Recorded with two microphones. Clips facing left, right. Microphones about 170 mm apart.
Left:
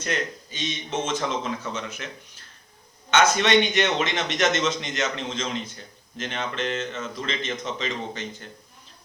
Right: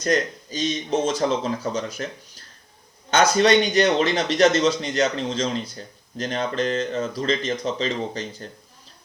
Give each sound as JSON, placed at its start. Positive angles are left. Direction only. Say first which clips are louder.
{"t": 0.0, "sound": "a man's voice", "louder": "right 7 dB", "side_deg": -40}
{"t": 3.1, "sound": "a man's voice", "louder": "right 3 dB", "side_deg": -35}